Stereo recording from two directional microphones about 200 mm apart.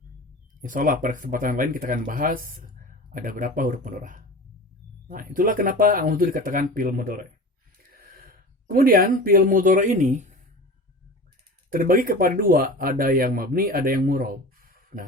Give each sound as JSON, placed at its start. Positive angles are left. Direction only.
{"t": 0.6, "sound": "speech", "side_deg": -40}
{"t": 11.7, "sound": "speech", "side_deg": -45}